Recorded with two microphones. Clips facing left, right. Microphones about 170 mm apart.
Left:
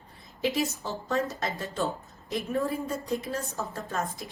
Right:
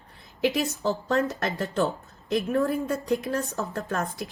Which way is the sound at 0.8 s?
70° right (ahead or behind).